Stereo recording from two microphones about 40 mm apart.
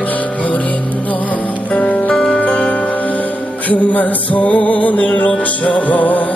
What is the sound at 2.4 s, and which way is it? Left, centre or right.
Music, left.